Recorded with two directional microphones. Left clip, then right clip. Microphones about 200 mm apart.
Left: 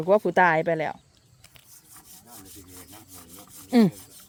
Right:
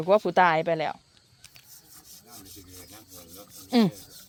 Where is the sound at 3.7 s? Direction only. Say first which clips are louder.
Left 2 dB; 25° left (ahead or behind).